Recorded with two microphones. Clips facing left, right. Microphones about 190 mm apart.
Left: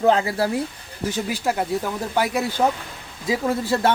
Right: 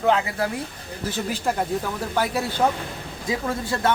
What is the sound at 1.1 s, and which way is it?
Speech, 10° left (ahead or behind).